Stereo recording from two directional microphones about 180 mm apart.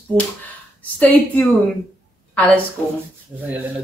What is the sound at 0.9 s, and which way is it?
Speech, 10° left (ahead or behind).